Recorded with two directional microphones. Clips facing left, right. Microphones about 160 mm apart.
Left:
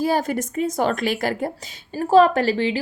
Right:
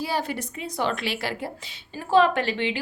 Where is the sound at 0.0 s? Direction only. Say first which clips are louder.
Left 7 dB; 45° left (ahead or behind).